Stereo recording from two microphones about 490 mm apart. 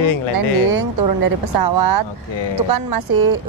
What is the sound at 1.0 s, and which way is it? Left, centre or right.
Speech, right.